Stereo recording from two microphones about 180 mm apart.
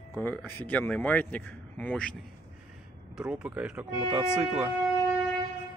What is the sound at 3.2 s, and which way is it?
Speech, 5° right (ahead or behind).